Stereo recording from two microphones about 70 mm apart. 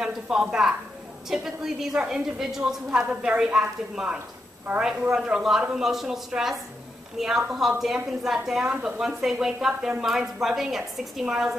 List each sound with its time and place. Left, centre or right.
0.0 s a woman's voice: centre
8.6 s a woman's voice: centre
9.0 s a woman's voice: centre